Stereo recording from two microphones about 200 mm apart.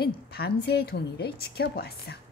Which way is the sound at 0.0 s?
55° left (ahead or behind).